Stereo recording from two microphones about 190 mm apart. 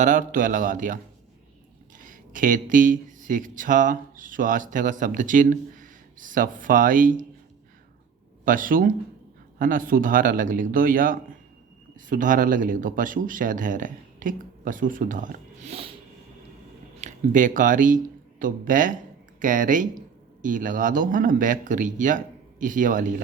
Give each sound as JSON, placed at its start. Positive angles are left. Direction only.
{"t": 0.0, "sound": "speech", "side_deg": -40}
{"t": 2.0, "sound": "speech", "side_deg": -45}
{"t": 8.4, "sound": "speech", "side_deg": -45}
{"t": 17.0, "sound": "speech", "side_deg": -40}